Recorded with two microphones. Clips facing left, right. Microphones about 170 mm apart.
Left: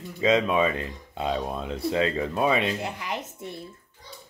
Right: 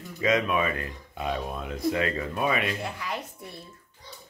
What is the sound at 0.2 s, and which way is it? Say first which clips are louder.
Speech: left 3 dB; 25° left (ahead or behind).